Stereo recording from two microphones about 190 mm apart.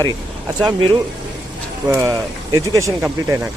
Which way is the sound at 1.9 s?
15° right (ahead or behind).